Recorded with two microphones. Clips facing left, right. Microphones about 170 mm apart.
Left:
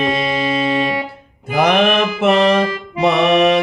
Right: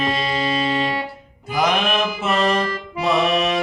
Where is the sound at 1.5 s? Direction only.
60° left (ahead or behind).